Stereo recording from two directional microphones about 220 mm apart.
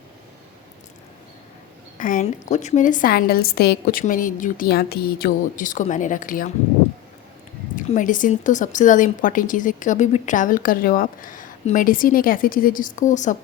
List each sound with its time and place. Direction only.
2.0 s speech: 35° left (ahead or behind)
7.8 s speech: 35° left (ahead or behind)